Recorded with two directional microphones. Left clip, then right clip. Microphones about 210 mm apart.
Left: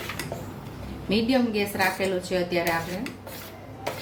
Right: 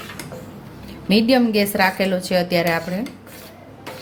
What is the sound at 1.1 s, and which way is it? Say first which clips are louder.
A woman's voice: right 7 dB; 45° right (ahead or behind).